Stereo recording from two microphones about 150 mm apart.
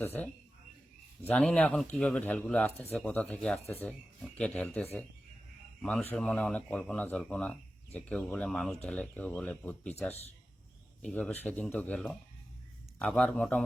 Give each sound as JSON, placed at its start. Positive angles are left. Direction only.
{"t": 0.0, "sound": "speech", "side_deg": 15}
{"t": 1.3, "sound": "speech", "side_deg": 10}
{"t": 11.0, "sound": "speech", "side_deg": 10}